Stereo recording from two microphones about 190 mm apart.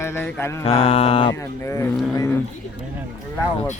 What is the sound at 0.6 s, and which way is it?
Mantra, 30° left (ahead or behind).